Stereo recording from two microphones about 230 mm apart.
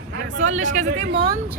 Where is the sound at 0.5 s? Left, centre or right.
Right.